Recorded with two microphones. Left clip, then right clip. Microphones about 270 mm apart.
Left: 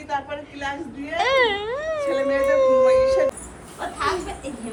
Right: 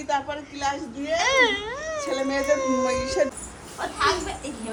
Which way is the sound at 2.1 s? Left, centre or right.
Right.